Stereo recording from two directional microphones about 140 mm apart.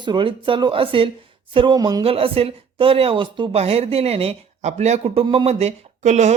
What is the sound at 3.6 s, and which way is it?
Speech, 45° right (ahead or behind).